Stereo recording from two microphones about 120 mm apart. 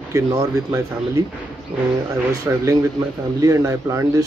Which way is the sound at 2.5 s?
20° right (ahead or behind).